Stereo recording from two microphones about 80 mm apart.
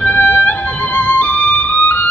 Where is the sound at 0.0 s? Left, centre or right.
Left.